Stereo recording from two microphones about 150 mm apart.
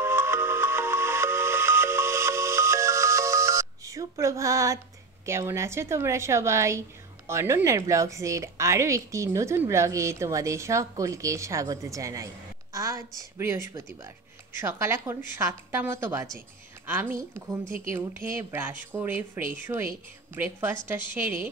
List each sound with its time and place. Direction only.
0.0 s music: 15° right (ahead or behind)
5.2 s a woman's voice: 20° right (ahead or behind)